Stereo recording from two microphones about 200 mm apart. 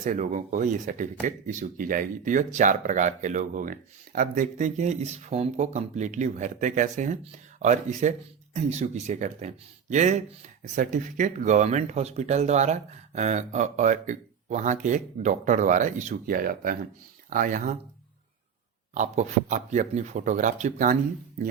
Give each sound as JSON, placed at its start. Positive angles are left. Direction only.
{"t": 0.0, "sound": "speech", "side_deg": -40}
{"t": 18.9, "sound": "speech", "side_deg": -35}